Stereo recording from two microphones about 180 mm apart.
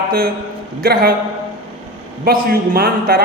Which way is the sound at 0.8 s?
55° right (ahead or behind).